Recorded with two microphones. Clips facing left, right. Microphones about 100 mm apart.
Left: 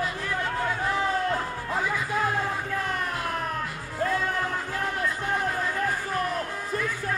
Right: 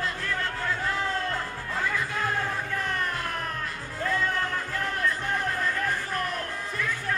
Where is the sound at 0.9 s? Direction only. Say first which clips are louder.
Left 5 dB; 15° left (ahead or behind).